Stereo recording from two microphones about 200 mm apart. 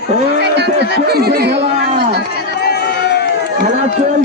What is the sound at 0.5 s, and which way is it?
Speech, 55° right (ahead or behind).